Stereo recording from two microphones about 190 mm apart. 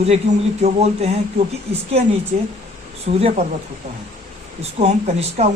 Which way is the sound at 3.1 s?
35° right (ahead or behind).